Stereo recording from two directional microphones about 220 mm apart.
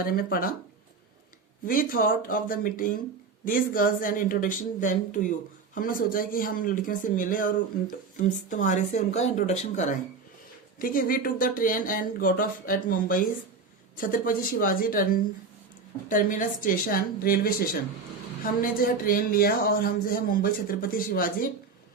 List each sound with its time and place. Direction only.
0.0 s speech: 40° left (ahead or behind)
1.6 s speech: 40° left (ahead or behind)